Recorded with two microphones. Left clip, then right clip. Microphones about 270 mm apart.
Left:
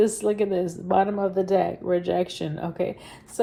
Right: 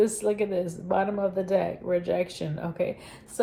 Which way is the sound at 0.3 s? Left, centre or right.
Left.